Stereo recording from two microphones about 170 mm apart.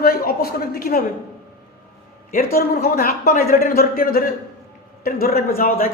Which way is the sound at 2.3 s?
60° left (ahead or behind).